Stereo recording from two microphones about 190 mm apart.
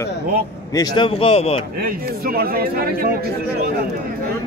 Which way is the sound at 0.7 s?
25° left (ahead or behind).